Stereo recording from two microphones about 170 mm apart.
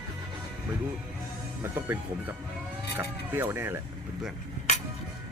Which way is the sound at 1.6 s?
10° right (ahead or behind).